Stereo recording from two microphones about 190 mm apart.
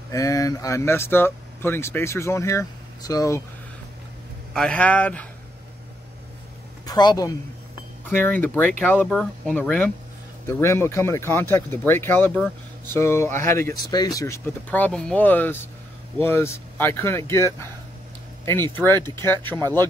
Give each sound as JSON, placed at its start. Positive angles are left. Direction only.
{"t": 0.1, "sound": "speech", "side_deg": 15}
{"t": 4.6, "sound": "speech", "side_deg": 5}
{"t": 6.9, "sound": "speech", "side_deg": 20}
{"t": 8.1, "sound": "speech", "side_deg": 10}